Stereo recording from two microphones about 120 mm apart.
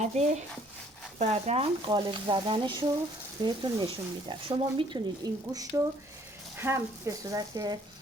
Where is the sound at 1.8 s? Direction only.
40° right (ahead or behind).